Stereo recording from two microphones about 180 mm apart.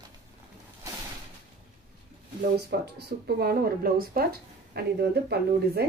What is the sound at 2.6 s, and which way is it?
Speech, 60° right (ahead or behind).